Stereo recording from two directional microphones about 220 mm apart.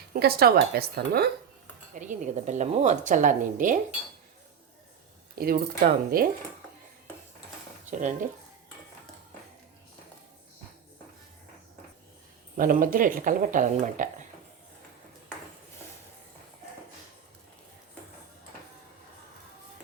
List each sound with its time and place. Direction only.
0.1 s speech: 45° right (ahead or behind)
2.0 s a woman's voice: 35° right (ahead or behind)
5.4 s speech: 45° right (ahead or behind)
7.9 s speech: 35° right (ahead or behind)
12.5 s a woman's voice: 40° right (ahead or behind)